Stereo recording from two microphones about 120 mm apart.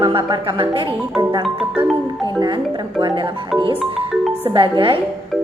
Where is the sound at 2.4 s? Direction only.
40° right (ahead or behind).